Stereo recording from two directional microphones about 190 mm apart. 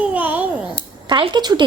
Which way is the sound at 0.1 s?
10° right (ahead or behind).